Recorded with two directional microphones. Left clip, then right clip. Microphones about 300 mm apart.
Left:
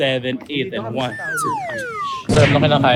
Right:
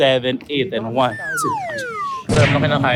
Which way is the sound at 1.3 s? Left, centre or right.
Centre.